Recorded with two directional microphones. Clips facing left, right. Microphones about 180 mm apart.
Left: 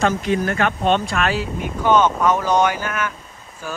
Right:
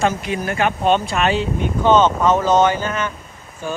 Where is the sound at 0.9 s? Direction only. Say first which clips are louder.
Right 2 dB; centre (ahead or behind).